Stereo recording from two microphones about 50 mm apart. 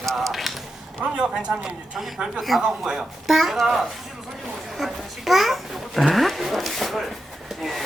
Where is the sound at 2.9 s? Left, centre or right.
Centre.